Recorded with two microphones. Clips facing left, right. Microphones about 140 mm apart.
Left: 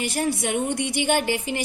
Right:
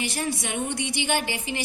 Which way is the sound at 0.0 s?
50° left (ahead or behind).